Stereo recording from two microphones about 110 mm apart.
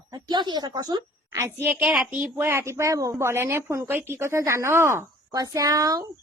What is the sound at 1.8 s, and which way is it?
A woman's voice, 10° right (ahead or behind).